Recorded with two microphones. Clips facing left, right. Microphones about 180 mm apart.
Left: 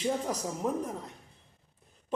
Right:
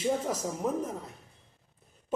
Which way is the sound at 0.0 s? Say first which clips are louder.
Right 2 dB; 5° right (ahead or behind).